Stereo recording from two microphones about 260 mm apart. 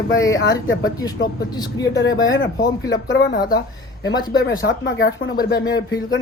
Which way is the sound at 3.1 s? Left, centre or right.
Left.